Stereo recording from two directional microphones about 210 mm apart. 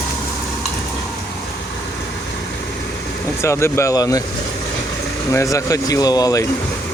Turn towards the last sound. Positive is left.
turn(degrees=15)  # may be behind; listen again after turning